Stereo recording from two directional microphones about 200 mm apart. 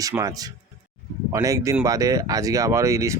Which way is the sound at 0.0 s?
15° right (ahead or behind).